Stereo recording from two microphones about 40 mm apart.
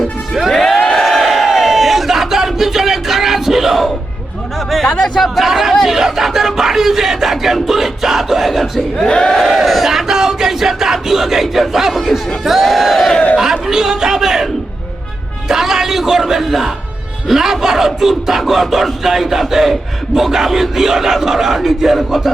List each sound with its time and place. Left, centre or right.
0.5 s a sound: centre
0.9 s crowd: centre
5.1 s speech: centre
9.0 s battle cry: centre
9.4 s crowd: centre
11.7 s speech: centre